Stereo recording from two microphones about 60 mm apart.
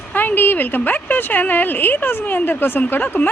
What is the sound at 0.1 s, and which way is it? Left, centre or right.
Speech, left.